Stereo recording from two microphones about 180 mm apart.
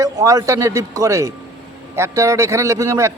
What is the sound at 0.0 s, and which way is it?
A man's voice, 20° right (ahead or behind).